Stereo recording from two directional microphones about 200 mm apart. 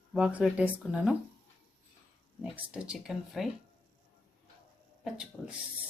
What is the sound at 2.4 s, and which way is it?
Speech, 5° right (ahead or behind).